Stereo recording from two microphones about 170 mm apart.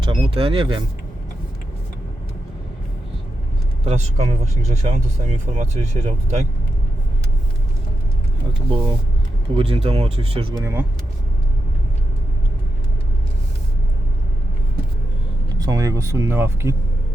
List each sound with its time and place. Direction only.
0.0 s speech: 30° right (ahead or behind)
3.8 s speech: 40° right (ahead or behind)
9.6 s speech: 35° right (ahead or behind)
10.6 s speech: 15° right (ahead or behind)
15.5 s speech: 20° right (ahead or behind)